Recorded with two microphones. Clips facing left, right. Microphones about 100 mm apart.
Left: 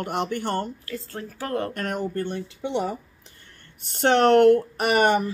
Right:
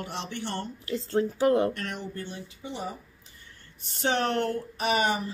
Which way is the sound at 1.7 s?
45° left (ahead or behind).